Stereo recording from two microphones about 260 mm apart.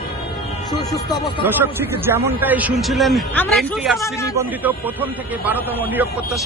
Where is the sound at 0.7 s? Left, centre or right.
Centre.